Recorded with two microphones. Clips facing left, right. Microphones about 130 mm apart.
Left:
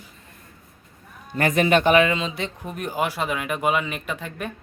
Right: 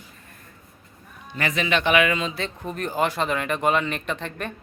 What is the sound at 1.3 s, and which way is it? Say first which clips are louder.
Speech: left 5 dB; 50° left (ahead or behind).